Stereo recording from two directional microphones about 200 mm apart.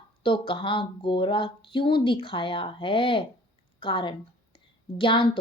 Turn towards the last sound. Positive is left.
turn(degrees=25)  # may be behind; listen again after turning